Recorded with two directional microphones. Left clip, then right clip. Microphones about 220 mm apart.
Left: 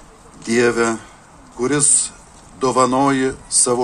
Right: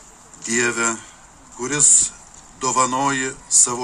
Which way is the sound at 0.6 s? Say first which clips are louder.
Left 5 dB; 35° left (ahead or behind).